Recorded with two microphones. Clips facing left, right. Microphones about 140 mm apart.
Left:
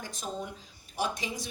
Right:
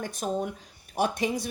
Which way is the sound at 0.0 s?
55° right (ahead or behind).